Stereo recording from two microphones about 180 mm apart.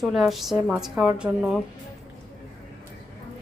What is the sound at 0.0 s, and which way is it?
A woman's voice, centre (ahead or behind).